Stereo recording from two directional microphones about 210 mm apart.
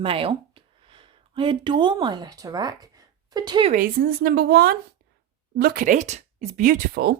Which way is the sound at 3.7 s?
40° right (ahead or behind).